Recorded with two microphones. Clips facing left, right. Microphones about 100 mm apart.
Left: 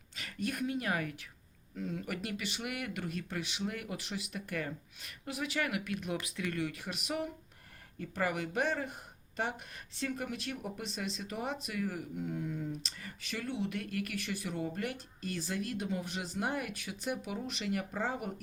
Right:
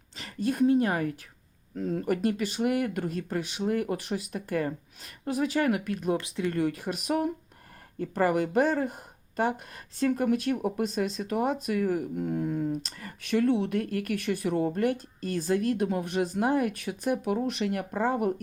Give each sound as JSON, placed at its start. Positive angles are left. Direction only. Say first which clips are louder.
{"t": 0.2, "sound": "a woman's voice", "louder": "right 10 dB", "side_deg": -30}
{"t": 6.2, "sound": "speech", "louder": "right 8 dB", "side_deg": -25}
{"t": 6.6, "sound": "speech", "louder": "right 9 dB", "side_deg": -45}